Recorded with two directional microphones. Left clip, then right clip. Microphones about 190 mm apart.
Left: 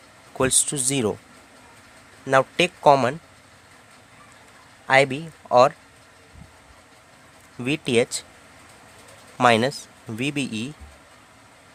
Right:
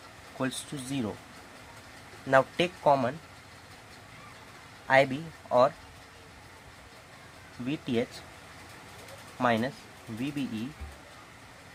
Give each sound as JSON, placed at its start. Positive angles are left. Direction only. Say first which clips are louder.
{"t": 0.3, "sound": "speech", "louder": "left 12 dB", "side_deg": 55}
{"t": 2.2, "sound": "speech", "louder": "left 5 dB", "side_deg": 35}
{"t": 4.9, "sound": "speech", "louder": "left 5 dB", "side_deg": 40}
{"t": 7.6, "sound": "speech", "louder": "left 10 dB", "side_deg": 55}
{"t": 9.4, "sound": "speech", "louder": "left 10 dB", "side_deg": 60}